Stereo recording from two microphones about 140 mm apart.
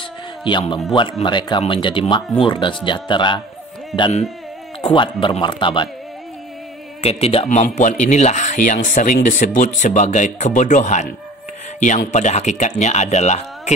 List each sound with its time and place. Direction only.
0.4 s speech: 35° left (ahead or behind)
3.9 s speech: centre (ahead or behind)
4.8 s speech: 35° left (ahead or behind)
7.0 s speech: 45° left (ahead or behind)
7.4 s speech: 60° left (ahead or behind)